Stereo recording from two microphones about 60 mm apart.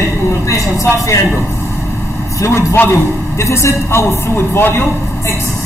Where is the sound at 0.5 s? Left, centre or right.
Left.